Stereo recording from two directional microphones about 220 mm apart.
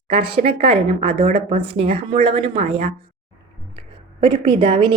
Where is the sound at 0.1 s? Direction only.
25° right (ahead or behind).